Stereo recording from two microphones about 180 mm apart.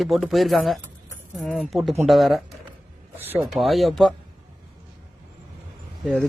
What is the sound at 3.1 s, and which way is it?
Speech, 10° right (ahead or behind).